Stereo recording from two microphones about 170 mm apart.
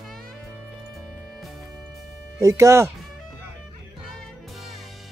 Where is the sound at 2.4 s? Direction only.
15° right (ahead or behind).